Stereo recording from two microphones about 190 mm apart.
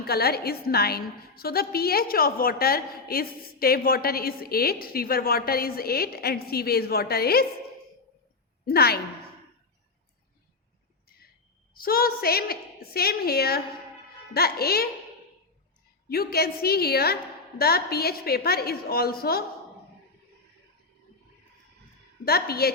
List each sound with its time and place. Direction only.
0.0 s a woman's voice: 55° left (ahead or behind)
8.6 s a woman's voice: 55° left (ahead or behind)
11.7 s a woman's voice: 50° left (ahead or behind)
16.0 s a woman's voice: 55° left (ahead or behind)
22.2 s a woman's voice: 55° left (ahead or behind)